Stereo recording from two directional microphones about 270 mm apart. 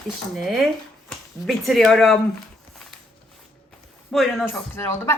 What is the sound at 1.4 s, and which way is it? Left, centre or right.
Speech, centre.